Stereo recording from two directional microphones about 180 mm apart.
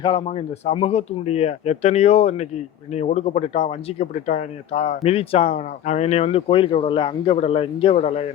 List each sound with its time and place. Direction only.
0.0 s a man's voice: 25° left (ahead or behind)